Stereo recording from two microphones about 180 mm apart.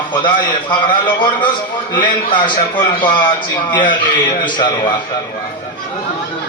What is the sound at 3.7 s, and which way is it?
A man's voice, 25° left (ahead or behind).